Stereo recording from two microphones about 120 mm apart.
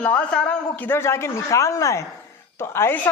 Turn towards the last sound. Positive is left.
turn(degrees=20)  # may be behind; listen again after turning